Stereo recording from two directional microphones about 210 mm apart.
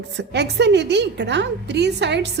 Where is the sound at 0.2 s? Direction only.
55° right (ahead or behind).